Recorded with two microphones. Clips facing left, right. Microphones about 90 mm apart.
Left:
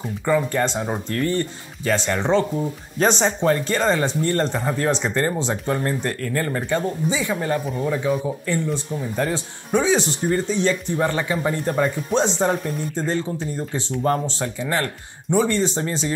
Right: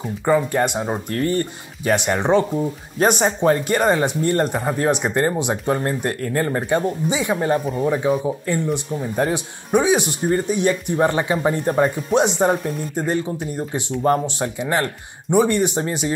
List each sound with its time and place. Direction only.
0.5 s speech: 15° right (ahead or behind)
1.1 s speech: 50° right (ahead or behind)
1.9 s speech: 20° right (ahead or behind)
12.5 s speech: 5° right (ahead or behind)
12.9 s speech: 15° right (ahead or behind)